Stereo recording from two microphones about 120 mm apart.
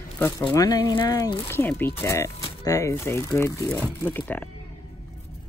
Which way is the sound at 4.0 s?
15° left (ahead or behind).